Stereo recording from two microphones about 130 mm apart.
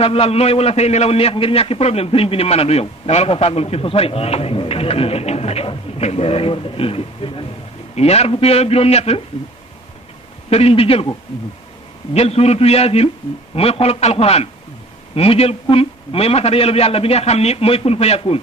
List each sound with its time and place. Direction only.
0.0 s a man's voice: 50° left (ahead or behind)
10.5 s a man's voice: 50° left (ahead or behind)
12.1 s a man's voice: 55° left (ahead or behind)